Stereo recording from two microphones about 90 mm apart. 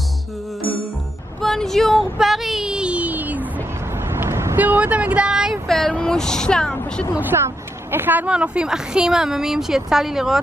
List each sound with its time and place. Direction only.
1.4 s a sound: 5° left (ahead or behind); by 3.4 s 20° right (ahead or behind)
4.1 s vehicle: 30° right (ahead or behind)
4.6 s speech: 20° right (ahead or behind)
5.7 s a woman's voice: 5° left (ahead or behind)
7.2 s speech: 25° right (ahead or behind)
8.3 s speech: 10° right (ahead or behind)